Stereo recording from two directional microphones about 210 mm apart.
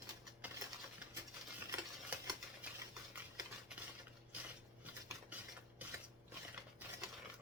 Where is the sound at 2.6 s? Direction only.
5° right (ahead or behind).